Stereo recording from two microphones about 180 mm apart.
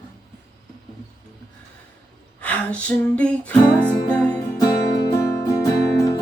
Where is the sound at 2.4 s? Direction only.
5° left (ahead or behind).